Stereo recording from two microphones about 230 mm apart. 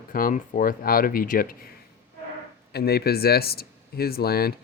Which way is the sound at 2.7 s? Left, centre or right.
Left.